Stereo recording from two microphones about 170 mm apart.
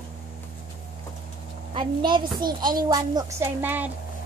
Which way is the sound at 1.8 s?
30° right (ahead or behind).